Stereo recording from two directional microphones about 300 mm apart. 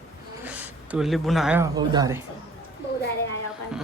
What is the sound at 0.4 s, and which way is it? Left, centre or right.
Speech, centre.